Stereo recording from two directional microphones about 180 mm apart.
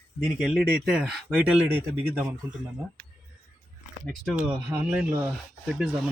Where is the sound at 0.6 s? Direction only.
5° right (ahead or behind).